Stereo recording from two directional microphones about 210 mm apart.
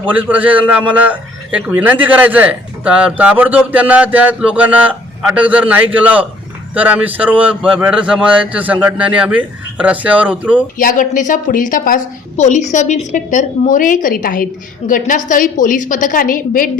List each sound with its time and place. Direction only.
0.0 s a man's voice: 5° right (ahead or behind)
10.8 s a woman's voice: 40° left (ahead or behind)